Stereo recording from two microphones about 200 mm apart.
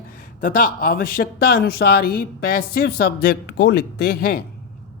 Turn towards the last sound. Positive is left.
turn(degrees=50)  # may be behind; listen again after turning